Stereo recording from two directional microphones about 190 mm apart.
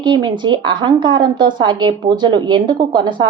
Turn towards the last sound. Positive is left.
turn(degrees=-25)  # may be behind; listen again after turning